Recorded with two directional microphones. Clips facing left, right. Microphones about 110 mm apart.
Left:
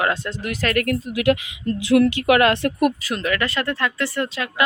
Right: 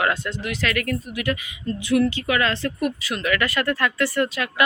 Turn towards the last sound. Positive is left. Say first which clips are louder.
# right 2 dB
turn(degrees=25)  # may be behind; listen again after turning